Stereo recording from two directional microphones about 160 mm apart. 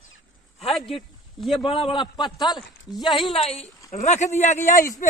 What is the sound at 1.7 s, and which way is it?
Speech, 30° left (ahead or behind).